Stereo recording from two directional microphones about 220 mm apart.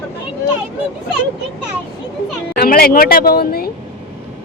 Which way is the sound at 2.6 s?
40° left (ahead or behind).